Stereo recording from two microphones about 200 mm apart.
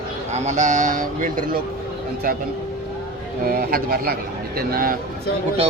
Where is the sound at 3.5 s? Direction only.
45° right (ahead or behind).